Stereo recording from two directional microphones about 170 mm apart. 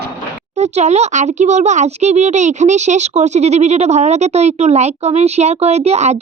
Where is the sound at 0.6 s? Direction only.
40° right (ahead or behind).